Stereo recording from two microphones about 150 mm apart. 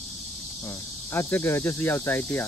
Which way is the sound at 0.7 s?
15° left (ahead or behind).